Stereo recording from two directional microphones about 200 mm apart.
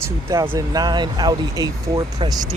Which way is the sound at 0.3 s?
15° right (ahead or behind).